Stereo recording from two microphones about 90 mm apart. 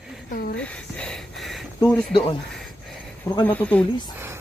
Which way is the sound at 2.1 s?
65° left (ahead or behind).